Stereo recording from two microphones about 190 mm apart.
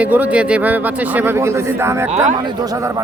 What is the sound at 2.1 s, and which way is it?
Speech, 40° right (ahead or behind).